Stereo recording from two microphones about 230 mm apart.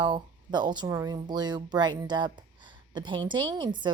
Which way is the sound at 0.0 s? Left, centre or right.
Centre.